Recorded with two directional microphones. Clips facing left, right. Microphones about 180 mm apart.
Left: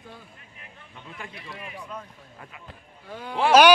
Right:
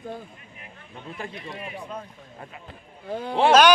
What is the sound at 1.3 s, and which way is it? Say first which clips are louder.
Speech: right 4 dB; 25° right (ahead or behind).